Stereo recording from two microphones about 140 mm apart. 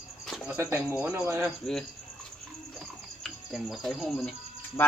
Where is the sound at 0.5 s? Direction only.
20° right (ahead or behind).